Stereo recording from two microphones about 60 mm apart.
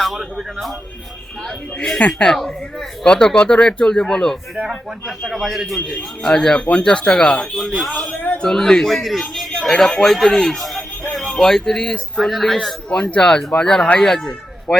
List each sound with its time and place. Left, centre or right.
0.0 s speech: centre
1.4 s speech: centre
4.6 s speech: centre
6.0 s speech: centre
12.2 s speech: centre
12.9 s a man's voice: centre